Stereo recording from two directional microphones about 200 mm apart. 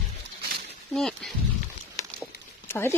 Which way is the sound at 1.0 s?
Centre (ahead or behind).